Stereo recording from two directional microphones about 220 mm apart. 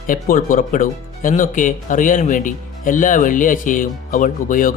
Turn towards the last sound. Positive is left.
turn(degrees=35)  # may be behind; listen again after turning